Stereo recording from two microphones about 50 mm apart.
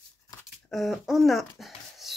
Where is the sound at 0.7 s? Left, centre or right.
Centre.